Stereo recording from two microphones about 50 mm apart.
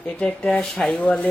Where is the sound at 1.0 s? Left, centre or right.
Left.